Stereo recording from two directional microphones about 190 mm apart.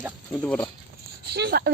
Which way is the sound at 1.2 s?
60° right (ahead or behind).